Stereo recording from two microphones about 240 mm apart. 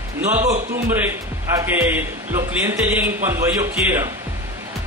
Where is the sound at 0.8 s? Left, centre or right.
Centre.